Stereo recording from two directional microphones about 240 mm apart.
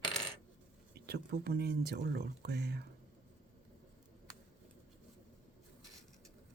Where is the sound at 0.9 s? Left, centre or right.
Right.